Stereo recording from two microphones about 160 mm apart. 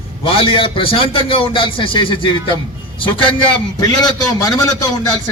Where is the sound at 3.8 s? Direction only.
25° left (ahead or behind).